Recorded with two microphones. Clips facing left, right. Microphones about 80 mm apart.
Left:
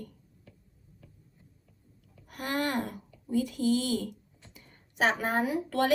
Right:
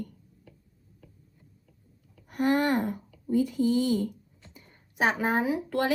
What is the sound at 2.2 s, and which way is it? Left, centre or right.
Speech, right.